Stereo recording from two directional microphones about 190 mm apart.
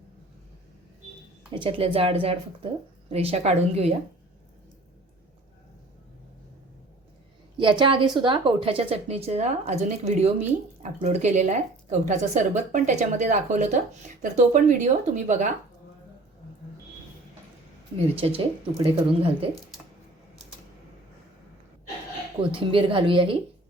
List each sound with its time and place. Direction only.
1.5 s a woman's voice: 25° right (ahead or behind)
7.5 s a woman's voice: 25° right (ahead or behind); by 15.5 s 40° right (ahead or behind)
18.0 s a woman's voice: 30° right (ahead or behind)
22.4 s a woman's voice: 25° right (ahead or behind)